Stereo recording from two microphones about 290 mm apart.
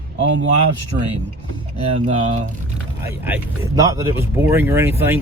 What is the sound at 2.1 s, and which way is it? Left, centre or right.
Speech, right.